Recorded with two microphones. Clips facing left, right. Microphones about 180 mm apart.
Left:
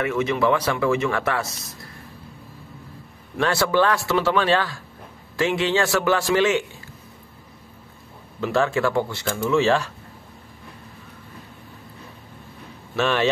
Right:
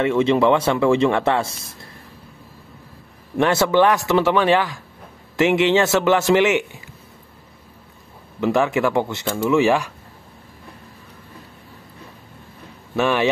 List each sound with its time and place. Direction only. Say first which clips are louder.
0.0 s speech: right 5 dB; 30° right (ahead or behind)
3.3 s speech: right 4 dB; 20° right (ahead or behind)
8.4 s speech: right 3 dB; 15° right (ahead or behind)
12.9 s speech: right 2 dB; 15° right (ahead or behind)